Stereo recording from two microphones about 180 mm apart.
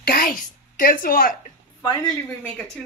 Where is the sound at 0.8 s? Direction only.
55° left (ahead or behind).